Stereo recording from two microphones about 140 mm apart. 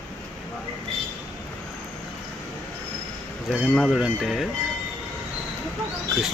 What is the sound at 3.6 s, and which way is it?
Speech, centre (ahead or behind).